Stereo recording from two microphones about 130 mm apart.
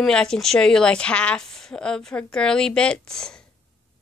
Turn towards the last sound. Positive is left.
turn(degrees=5)  # may be behind; listen again after turning